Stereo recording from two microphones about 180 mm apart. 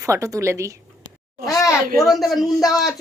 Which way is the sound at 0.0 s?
15° right (ahead or behind).